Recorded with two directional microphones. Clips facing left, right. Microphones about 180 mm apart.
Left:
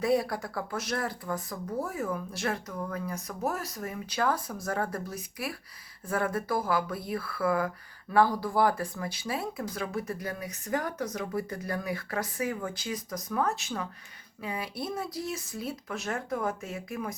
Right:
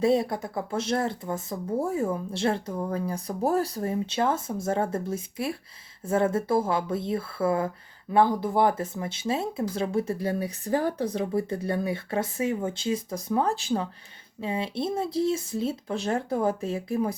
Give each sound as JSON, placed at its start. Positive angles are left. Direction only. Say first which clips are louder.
{"t": 0.0, "sound": "speech", "louder": "right 4 dB", "side_deg": -25}